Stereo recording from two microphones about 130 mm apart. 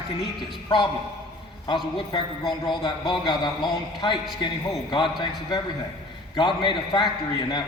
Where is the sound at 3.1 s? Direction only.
35° left (ahead or behind).